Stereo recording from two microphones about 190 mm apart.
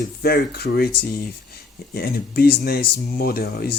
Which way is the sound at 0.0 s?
55° left (ahead or behind).